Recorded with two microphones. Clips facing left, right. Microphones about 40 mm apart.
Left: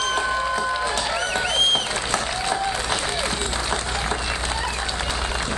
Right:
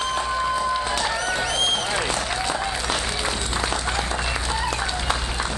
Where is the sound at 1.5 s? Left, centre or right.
Left.